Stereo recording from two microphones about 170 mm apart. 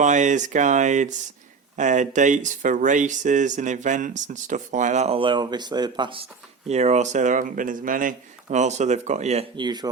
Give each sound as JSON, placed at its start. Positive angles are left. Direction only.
{"t": 0.0, "sound": "speech", "side_deg": -45}
{"t": 6.7, "sound": "speech", "side_deg": -40}
{"t": 9.6, "sound": "speech", "side_deg": -25}